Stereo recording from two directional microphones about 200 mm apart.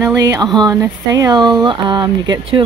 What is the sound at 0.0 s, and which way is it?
Speech, 15° right (ahead or behind).